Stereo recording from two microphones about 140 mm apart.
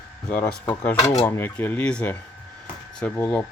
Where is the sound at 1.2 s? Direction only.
15° left (ahead or behind).